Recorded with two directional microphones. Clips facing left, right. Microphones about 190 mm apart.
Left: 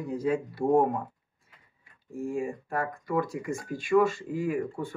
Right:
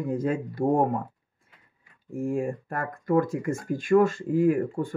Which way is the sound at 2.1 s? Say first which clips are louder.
Right 4 dB; 50° right (ahead or behind).